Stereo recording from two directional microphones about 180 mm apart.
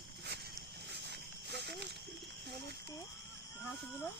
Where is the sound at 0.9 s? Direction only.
65° right (ahead or behind).